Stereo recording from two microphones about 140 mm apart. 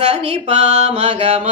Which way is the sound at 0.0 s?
50° right (ahead or behind).